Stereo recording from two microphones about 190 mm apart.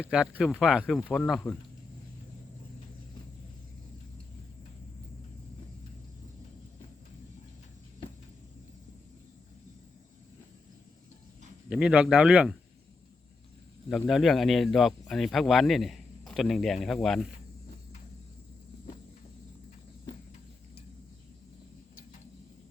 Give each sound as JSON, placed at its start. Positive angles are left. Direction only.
{"t": 0.0, "sound": "speech", "side_deg": -5}
{"t": 11.7, "sound": "speech", "side_deg": -5}
{"t": 13.9, "sound": "speech", "side_deg": 0}